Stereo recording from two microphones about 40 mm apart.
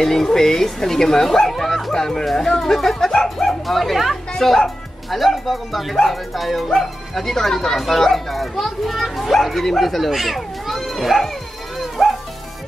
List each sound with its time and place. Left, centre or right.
0.0 s a child's voice: centre
12.0 s bow-wow: centre